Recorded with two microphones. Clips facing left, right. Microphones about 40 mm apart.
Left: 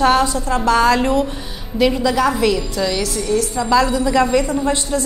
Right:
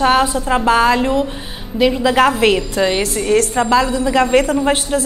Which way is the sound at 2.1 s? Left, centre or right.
Right.